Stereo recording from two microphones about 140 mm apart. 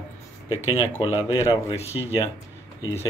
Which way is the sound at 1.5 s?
40° left (ahead or behind).